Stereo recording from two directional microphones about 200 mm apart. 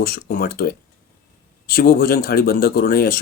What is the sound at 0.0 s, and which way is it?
Speech, 50° left (ahead or behind).